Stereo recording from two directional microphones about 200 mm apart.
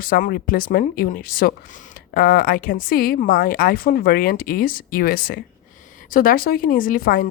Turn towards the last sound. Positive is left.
turn(degrees=45)  # may be behind; listen again after turning